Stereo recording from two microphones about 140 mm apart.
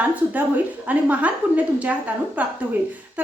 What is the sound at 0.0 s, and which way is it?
A woman's voice, 10° right (ahead or behind).